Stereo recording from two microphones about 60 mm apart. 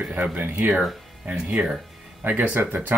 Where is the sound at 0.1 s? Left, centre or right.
Right.